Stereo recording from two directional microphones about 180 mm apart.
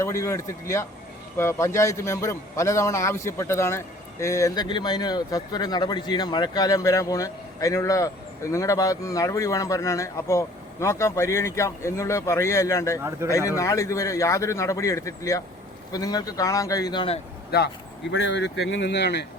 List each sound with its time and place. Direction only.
0.0 s a man's voice: 15° left (ahead or behind)
13.0 s speech: 15° right (ahead or behind)
13.6 s a man's voice: 15° left (ahead or behind)
17.5 s speech: 60° left (ahead or behind)
18.1 s speech: 85° left; by 19.2 s 70° left (ahead or behind)